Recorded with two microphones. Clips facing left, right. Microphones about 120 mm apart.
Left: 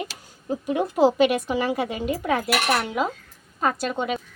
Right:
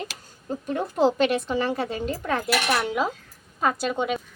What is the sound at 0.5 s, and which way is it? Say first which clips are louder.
Speech: left 3 dB; 10° left (ahead or behind).